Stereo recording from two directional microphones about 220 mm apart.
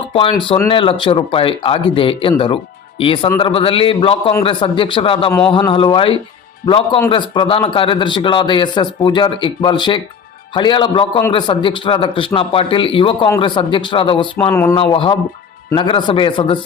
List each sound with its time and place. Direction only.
0.1 s speech: 25° left (ahead or behind)
14.5 s speech: 10° left (ahead or behind)
14.8 s speech: 25° left (ahead or behind)